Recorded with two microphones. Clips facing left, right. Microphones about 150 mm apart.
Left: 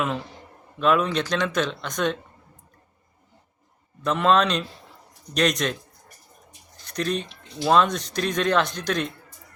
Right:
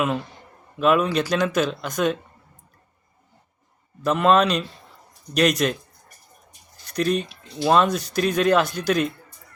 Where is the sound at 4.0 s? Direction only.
5° right (ahead or behind).